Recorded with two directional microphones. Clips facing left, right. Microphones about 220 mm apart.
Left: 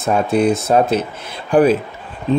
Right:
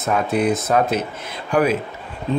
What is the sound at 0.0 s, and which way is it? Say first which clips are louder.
Speech: left 4 dB; 30° left (ahead or behind).